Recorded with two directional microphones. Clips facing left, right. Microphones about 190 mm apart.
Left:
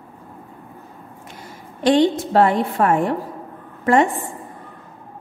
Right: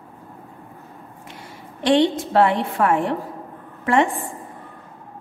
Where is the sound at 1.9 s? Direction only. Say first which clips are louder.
Left 2 dB; 40° left (ahead or behind).